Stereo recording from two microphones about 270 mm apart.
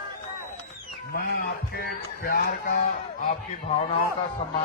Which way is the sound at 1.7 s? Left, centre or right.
Left.